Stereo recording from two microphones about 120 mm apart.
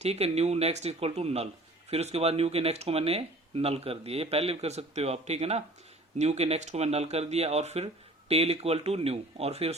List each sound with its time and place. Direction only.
0.0 s speech: 60° right (ahead or behind)